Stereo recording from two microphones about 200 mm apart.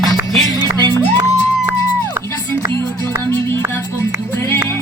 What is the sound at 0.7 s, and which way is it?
Music, 15° right (ahead or behind).